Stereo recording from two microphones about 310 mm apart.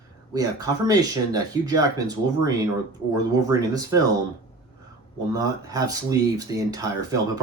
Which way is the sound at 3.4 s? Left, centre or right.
Centre.